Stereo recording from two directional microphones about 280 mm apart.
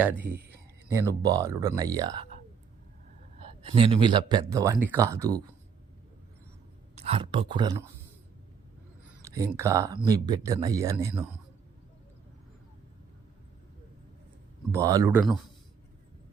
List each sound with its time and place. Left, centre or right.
0.0 s speech: centre
3.6 s speech: centre
6.9 s speech: right
9.2 s a sound: centre
9.6 s speech: centre
14.7 s speech: centre